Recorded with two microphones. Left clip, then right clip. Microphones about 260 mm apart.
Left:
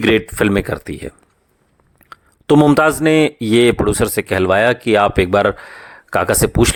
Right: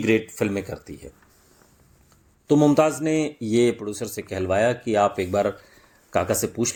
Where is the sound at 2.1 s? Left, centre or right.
Left.